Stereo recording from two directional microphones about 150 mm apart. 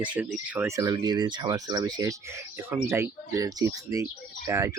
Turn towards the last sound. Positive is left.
turn(degrees=-20)  # may be behind; listen again after turning